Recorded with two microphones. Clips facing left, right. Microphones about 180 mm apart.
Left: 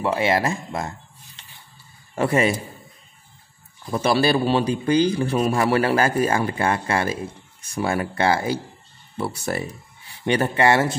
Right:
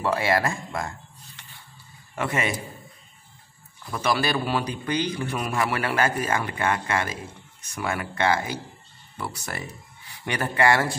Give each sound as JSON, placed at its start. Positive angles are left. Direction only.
{"t": 0.0, "sound": "a man's voice", "side_deg": 20}
{"t": 3.9, "sound": "a man's voice", "side_deg": 30}